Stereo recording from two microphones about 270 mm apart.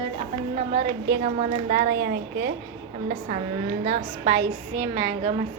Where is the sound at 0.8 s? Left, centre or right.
Right.